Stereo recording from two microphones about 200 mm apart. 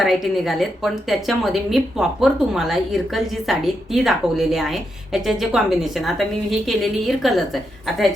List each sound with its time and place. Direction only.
0.0 s a woman's voice: centre (ahead or behind)